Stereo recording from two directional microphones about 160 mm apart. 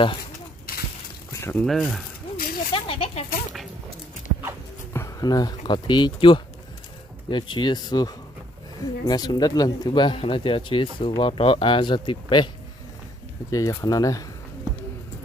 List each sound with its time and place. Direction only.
1.4 s speech: 10° left (ahead or behind)
2.3 s snake: 65° left (ahead or behind)
2.7 s speech: 35° left (ahead or behind)
4.9 s speech: 20° left (ahead or behind)
13.5 s speech: 20° left (ahead or behind)